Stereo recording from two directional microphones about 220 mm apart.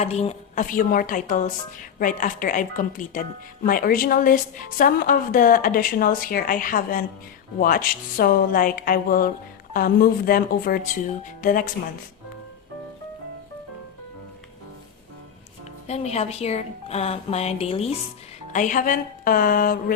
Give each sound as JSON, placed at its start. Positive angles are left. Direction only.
{"t": 0.0, "sound": "speech", "side_deg": 30}
{"t": 15.9, "sound": "speech", "side_deg": 30}